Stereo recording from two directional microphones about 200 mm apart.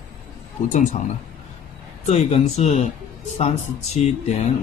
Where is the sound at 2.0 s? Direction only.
35° left (ahead or behind).